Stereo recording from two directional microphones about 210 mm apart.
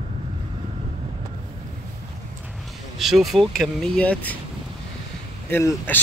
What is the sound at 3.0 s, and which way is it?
Speech, centre (ahead or behind).